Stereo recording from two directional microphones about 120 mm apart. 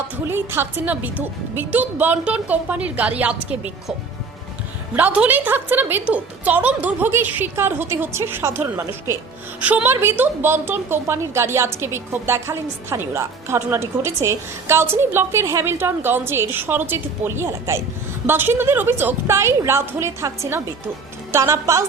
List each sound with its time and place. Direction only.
0.3 s a woman's voice: 20° right (ahead or behind)
4.9 s a woman's voice: 10° right (ahead or behind)